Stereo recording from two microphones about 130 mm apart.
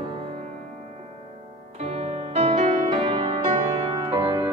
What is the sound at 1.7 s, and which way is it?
Music, 55° right (ahead or behind).